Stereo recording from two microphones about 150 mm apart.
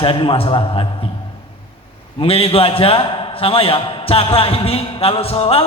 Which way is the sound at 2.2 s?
40° left (ahead or behind).